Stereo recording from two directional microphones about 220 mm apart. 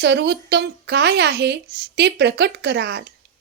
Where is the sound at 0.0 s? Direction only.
50° right (ahead or behind).